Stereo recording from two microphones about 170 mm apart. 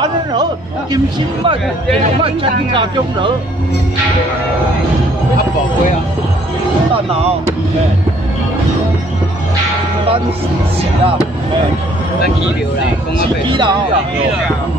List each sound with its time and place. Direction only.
0.0 s a sound: 25° right (ahead or behind)
0.9 s speech: 30° right (ahead or behind)
13.5 s speech: 30° right (ahead or behind)